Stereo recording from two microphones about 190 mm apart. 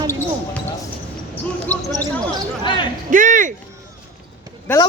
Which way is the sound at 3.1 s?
45° right (ahead or behind).